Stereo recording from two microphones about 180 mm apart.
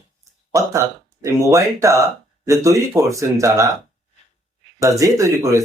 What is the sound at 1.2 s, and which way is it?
Speech, 15° right (ahead or behind).